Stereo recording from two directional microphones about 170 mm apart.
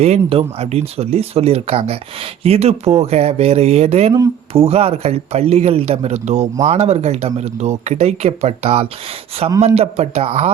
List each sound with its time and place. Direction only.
0.0 s speech: 35° right (ahead or behind)